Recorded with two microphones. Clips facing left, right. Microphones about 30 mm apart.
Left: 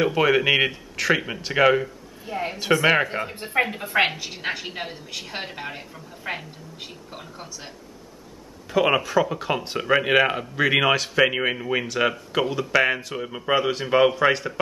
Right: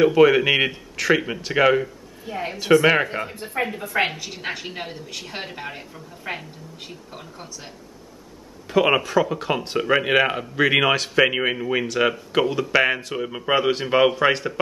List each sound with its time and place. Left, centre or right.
0.0 s speech: centre
3.4 s a woman's voice: left
3.7 s a woman's voice: left
4.1 s speech: centre
8.6 s speech: centre